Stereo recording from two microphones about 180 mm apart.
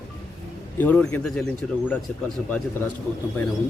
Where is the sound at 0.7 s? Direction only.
10° left (ahead or behind).